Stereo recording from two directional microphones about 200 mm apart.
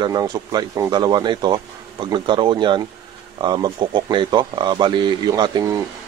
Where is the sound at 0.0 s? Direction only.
20° right (ahead or behind).